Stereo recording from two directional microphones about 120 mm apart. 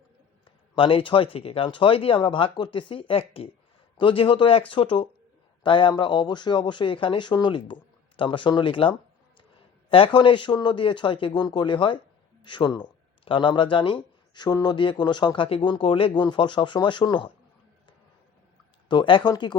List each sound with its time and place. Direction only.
0.8 s speech: 45° left (ahead or behind)
18.9 s speech: 45° left (ahead or behind)